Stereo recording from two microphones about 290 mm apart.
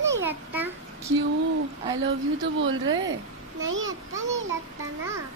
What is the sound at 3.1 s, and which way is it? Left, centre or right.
Speech, right.